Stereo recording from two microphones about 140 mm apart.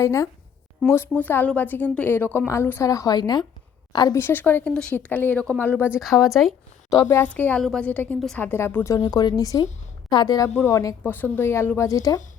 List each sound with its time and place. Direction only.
0.0 s a woman's voice: 20° left (ahead or behind)
4.2 s a woman's voice: 15° left (ahead or behind)
5.8 s speech: 5° right (ahead or behind)
6.9 s speech: 25° left (ahead or behind)
7.3 s a woman's voice: 10° left (ahead or behind)